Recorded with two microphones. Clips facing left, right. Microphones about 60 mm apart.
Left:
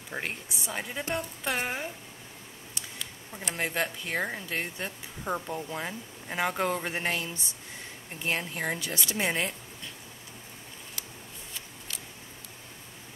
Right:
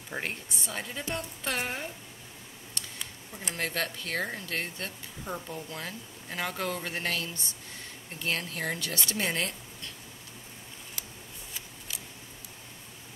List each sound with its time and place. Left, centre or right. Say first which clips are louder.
0.1 s a woman's voice: even; centre
0.7 s speech: left 3 dB; centre
2.8 s a sound: right 1 dB; centre
3.3 s speech: left 2 dB; centre
5.2 s speech: left 5 dB; left